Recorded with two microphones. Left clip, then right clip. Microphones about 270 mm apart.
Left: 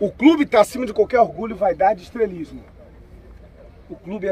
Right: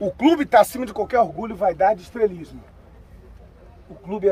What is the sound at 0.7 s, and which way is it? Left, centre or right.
Speech, right.